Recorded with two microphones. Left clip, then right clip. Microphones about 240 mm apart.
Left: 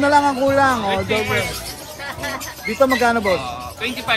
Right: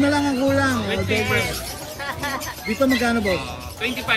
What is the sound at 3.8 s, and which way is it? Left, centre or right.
Speech, centre.